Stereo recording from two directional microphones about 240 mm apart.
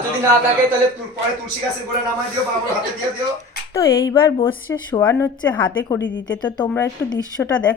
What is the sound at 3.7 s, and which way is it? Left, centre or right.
Speech, centre.